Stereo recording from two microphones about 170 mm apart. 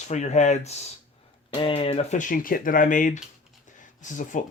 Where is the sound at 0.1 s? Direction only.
45° left (ahead or behind).